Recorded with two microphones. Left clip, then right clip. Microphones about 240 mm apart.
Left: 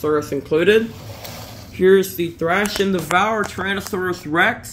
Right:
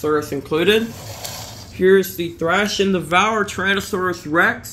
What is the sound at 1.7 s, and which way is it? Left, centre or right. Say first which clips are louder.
A man's voice: even; centre.